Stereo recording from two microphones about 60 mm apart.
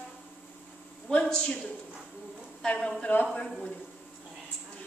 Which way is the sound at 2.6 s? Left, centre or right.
Centre.